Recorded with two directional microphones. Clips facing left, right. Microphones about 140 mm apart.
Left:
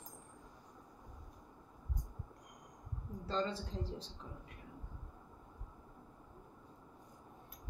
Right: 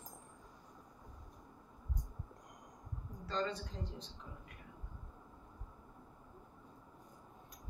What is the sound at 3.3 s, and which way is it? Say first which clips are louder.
Speech: left 1 dB; 30° left (ahead or behind).